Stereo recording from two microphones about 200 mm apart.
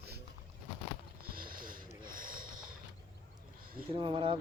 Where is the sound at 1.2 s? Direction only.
45° right (ahead or behind).